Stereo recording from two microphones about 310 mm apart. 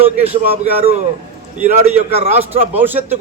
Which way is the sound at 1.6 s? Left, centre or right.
Right.